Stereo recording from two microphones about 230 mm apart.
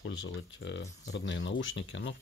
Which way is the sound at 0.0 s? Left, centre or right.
Left.